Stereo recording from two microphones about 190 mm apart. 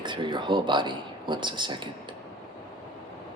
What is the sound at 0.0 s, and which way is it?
Speech, 25° right (ahead or behind).